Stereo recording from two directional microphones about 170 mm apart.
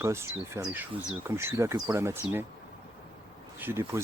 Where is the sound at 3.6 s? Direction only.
15° right (ahead or behind).